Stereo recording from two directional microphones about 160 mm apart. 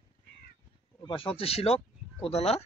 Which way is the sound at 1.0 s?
35° left (ahead or behind).